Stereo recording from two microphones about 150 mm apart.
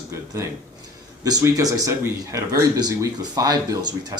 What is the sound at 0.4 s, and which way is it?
Speech, 20° right (ahead or behind).